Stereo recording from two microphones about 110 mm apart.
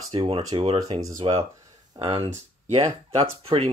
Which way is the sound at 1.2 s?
45° right (ahead or behind).